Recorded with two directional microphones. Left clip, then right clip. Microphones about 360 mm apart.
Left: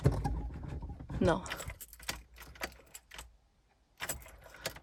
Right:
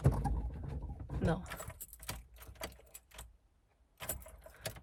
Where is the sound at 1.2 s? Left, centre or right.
Centre.